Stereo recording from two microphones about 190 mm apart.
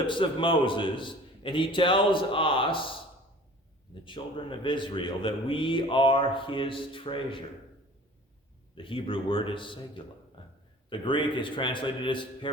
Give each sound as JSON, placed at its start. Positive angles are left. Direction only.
{"t": 0.0, "sound": "a man's voice", "side_deg": 25}
{"t": 4.0, "sound": "a man's voice", "side_deg": 25}
{"t": 8.8, "sound": "a man's voice", "side_deg": 30}
{"t": 10.4, "sound": "a sound", "side_deg": 25}
{"t": 10.8, "sound": "a man's voice", "side_deg": 25}